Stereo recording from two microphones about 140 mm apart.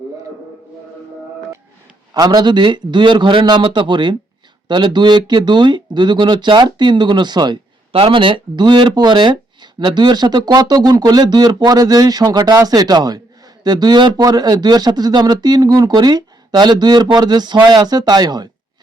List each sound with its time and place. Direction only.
2.1 s a man's voice: 30° right (ahead or behind)